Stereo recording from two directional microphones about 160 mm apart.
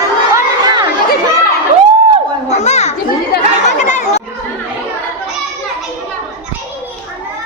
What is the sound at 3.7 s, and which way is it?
Chatter, 50° left (ahead or behind).